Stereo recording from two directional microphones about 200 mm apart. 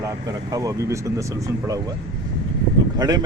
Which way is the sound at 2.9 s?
20° right (ahead or behind).